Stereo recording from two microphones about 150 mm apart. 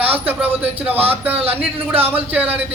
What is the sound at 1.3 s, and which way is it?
Speech, 40° right (ahead or behind).